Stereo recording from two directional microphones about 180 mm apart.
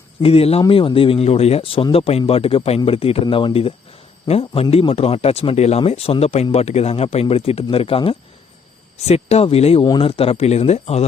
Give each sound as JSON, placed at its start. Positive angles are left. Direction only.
{"t": 0.2, "sound": "speech", "side_deg": 35}